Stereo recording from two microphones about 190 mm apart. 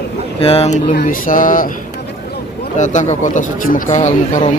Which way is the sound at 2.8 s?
40° left (ahead or behind).